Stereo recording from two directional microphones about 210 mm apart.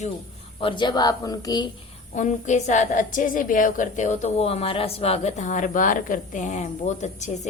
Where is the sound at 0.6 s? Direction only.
20° left (ahead or behind).